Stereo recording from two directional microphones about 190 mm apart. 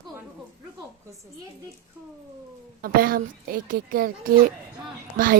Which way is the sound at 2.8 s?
50° right (ahead or behind).